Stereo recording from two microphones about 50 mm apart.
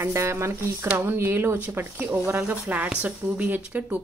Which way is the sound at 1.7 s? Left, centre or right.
Right.